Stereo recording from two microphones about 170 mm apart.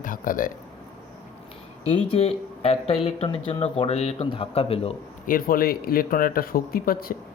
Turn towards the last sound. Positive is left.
turn(degrees=60)  # may be behind; listen again after turning